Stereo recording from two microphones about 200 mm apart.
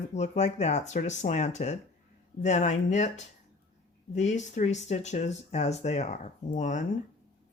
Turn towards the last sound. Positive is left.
turn(degrees=40)  # may be behind; listen again after turning